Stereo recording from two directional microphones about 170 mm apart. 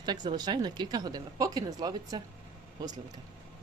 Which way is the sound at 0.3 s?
25° right (ahead or behind).